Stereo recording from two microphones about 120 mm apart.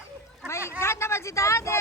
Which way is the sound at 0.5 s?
20° left (ahead or behind).